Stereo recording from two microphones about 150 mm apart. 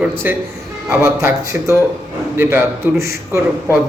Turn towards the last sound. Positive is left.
turn(degrees=-20)  # may be behind; listen again after turning